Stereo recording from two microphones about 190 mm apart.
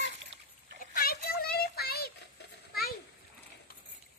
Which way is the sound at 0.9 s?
50° left (ahead or behind).